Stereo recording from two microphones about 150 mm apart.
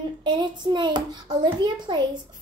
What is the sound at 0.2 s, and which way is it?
A child's voice, 30° right (ahead or behind).